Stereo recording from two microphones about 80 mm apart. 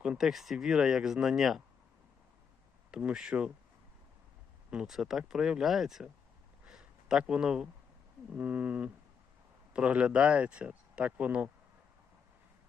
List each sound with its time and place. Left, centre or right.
0.0 s speech: centre
2.9 s speech: centre
4.7 s speech: centre
6.7 s a sound: centre
8.3 s a sound: right
9.7 s speech: centre